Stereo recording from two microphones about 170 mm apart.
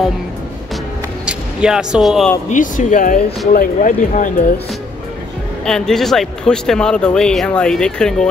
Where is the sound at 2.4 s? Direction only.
50° left (ahead or behind).